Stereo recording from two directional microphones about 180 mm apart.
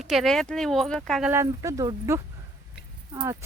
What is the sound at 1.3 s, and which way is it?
Speech, 15° right (ahead or behind).